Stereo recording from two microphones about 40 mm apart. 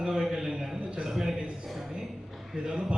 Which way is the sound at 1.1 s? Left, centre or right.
Centre.